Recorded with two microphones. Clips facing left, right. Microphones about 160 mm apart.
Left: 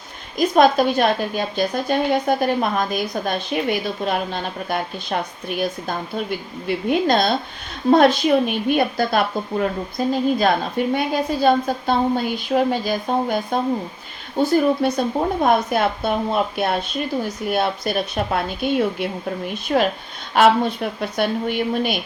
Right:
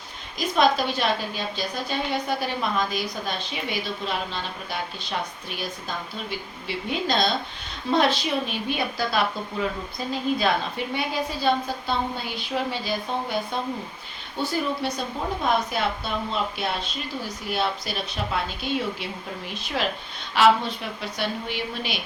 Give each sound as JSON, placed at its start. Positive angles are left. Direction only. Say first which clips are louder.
{"t": 0.3, "sound": "a woman's voice", "louder": "left 7 dB", "side_deg": 50}
{"t": 6.7, "sound": "a woman's voice", "louder": "left 8 dB", "side_deg": 55}